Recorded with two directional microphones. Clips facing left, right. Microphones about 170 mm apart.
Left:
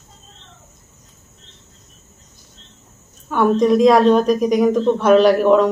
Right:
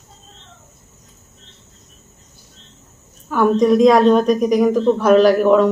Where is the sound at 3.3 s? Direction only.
Centre (ahead or behind).